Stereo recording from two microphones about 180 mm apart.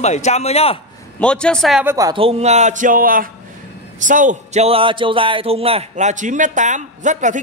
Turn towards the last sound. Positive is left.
turn(degrees=-45)  # may be behind; listen again after turning